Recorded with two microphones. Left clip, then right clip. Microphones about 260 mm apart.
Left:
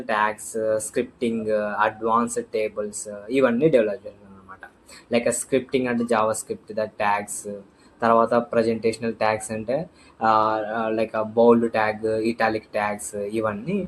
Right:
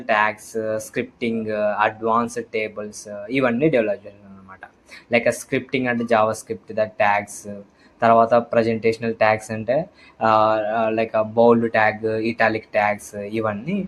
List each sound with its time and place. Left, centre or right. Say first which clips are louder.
0.0 s speech: right 3 dB; right
5.1 s speech: right 2 dB; right